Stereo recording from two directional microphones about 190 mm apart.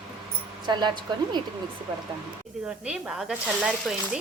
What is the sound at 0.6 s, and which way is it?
Speech, 25° right (ahead or behind).